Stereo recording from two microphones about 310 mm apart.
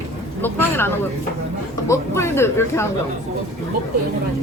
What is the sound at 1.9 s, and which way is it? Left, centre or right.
Speech, centre.